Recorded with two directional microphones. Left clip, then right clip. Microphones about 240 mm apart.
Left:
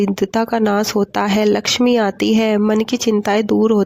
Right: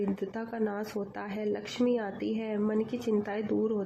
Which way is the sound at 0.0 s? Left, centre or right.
Left.